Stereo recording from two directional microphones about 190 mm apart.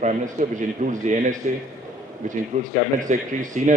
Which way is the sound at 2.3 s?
45° right (ahead or behind).